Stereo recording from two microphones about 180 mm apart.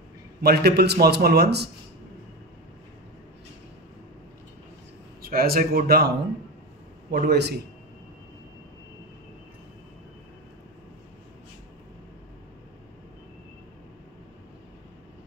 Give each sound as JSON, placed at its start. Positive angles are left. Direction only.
{"t": 0.4, "sound": "a man's voice", "side_deg": -60}
{"t": 5.2, "sound": "a man's voice", "side_deg": -55}